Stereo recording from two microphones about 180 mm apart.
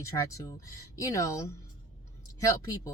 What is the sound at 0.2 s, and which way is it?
Speech, 15° left (ahead or behind).